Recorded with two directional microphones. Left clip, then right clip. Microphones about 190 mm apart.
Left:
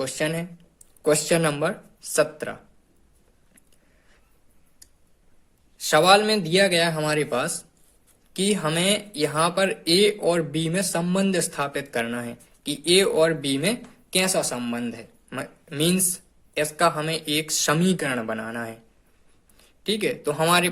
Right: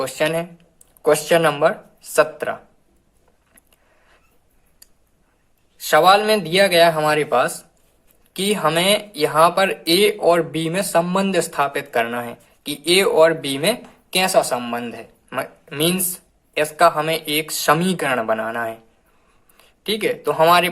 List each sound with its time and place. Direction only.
0.0 s speech: 35° left (ahead or behind)
1.0 s speech: 45° left (ahead or behind)
5.9 s speech: 40° left (ahead or behind)